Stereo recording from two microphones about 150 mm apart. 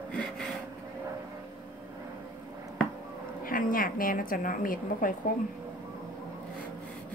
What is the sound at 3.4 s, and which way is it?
A woman's voice, 70° left (ahead or behind).